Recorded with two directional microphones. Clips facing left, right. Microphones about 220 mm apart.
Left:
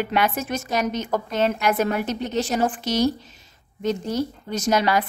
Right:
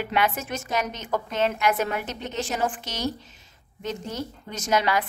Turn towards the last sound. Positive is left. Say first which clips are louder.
# left 3 dB
turn(degrees=35)  # may be behind; listen again after turning